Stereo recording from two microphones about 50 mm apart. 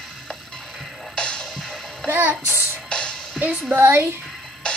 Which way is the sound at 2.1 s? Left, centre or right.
Right.